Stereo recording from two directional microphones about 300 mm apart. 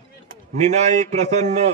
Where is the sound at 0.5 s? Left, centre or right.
Right.